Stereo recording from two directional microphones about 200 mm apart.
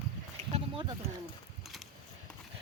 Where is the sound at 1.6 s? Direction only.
Centre (ahead or behind).